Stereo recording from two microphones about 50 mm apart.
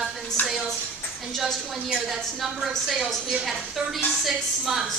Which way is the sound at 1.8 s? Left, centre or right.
Centre.